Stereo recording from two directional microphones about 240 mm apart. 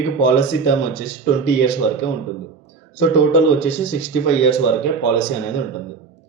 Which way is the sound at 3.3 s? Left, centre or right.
Left.